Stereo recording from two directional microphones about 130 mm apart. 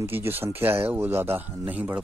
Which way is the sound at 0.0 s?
20° right (ahead or behind).